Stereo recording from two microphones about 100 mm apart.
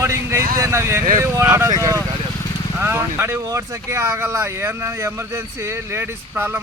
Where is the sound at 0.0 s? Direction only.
30° right (ahead or behind).